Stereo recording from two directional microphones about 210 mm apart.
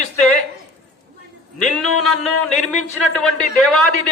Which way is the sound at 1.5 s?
Centre (ahead or behind).